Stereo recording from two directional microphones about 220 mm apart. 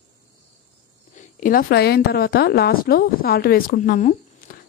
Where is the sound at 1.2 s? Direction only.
35° left (ahead or behind).